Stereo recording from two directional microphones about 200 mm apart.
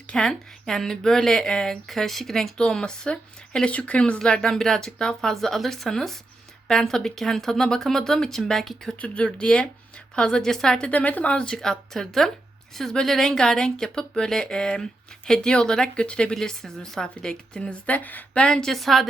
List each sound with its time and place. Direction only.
0.1 s speech: 5° left (ahead or behind)